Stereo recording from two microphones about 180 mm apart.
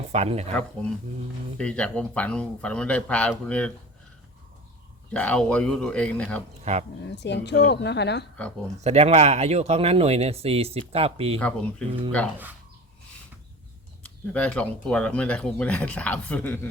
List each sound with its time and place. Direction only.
0.1 s speech: 35° right (ahead or behind)
0.5 s speech: 5° left (ahead or behind)
5.1 s speech: 5° left (ahead or behind)
6.7 s speech: 35° right (ahead or behind)
7.0 s speech: 70° left (ahead or behind)
8.8 s speech: 35° right (ahead or behind)
11.3 s speech: 5° left (ahead or behind)
14.3 s speech: 5° left (ahead or behind)